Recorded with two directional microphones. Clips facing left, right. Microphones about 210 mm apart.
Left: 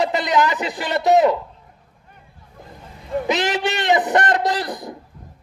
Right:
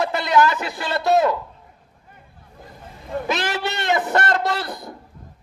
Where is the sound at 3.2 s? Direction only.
20° left (ahead or behind).